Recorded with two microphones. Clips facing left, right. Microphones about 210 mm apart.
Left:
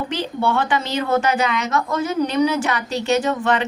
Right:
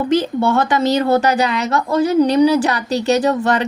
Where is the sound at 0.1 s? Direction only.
40° right (ahead or behind).